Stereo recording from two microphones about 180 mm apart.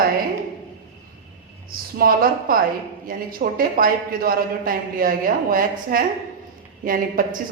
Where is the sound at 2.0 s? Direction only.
55° right (ahead or behind).